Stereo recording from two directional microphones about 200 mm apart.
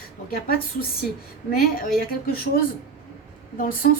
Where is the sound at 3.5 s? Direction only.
45° left (ahead or behind).